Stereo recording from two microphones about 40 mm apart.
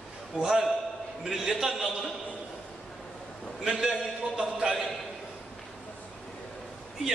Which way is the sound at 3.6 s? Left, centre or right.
Centre.